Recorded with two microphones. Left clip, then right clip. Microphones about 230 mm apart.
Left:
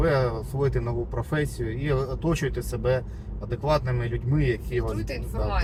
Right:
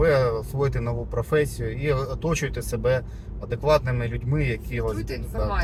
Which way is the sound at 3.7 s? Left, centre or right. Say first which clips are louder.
Right 4 dB; centre.